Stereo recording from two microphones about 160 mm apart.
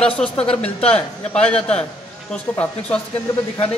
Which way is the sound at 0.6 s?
40° left (ahead or behind).